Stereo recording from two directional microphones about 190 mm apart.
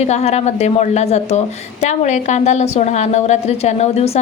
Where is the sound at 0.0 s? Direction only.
35° left (ahead or behind).